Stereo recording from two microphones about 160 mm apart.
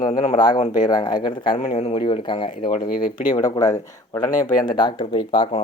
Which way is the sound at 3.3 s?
25° left (ahead or behind).